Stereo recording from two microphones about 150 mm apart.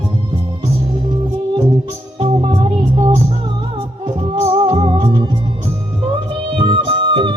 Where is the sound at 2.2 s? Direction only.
35° right (ahead or behind).